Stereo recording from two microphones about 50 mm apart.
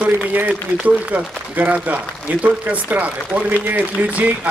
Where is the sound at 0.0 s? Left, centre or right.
Right.